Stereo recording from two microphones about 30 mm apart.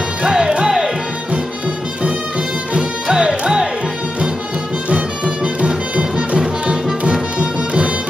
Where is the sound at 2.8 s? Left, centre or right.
Right.